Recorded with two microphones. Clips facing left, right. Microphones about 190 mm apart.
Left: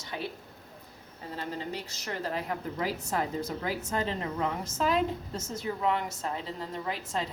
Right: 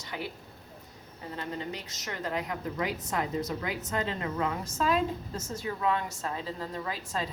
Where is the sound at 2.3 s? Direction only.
30° left (ahead or behind).